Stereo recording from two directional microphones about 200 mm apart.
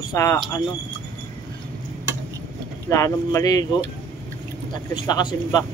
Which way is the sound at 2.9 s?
15° left (ahead or behind).